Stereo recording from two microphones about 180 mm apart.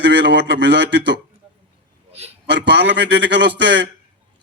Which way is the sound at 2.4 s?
75° right (ahead or behind).